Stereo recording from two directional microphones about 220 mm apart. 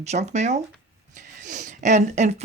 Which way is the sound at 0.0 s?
30° right (ahead or behind).